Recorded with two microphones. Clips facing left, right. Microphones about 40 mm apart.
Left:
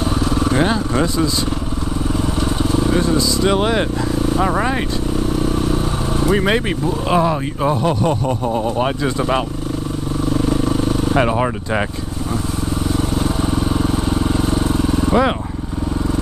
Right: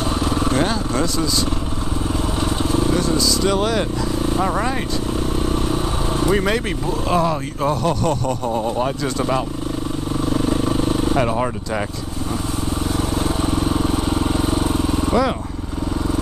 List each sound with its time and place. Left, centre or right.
0.2 s vehicle: centre
0.5 s speech: centre
3.1 s vehicle: left
4.4 s speech: centre
5.4 s motorcycle: centre
7.1 s speech: centre
10.3 s motorcycle: centre
11.1 s speech: left
12.9 s vehicle: centre